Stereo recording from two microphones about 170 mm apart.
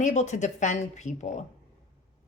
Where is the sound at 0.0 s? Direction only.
45° left (ahead or behind).